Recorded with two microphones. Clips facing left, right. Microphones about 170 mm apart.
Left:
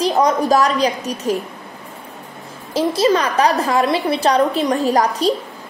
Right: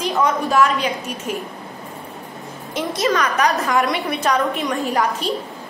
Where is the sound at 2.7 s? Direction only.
30° left (ahead or behind).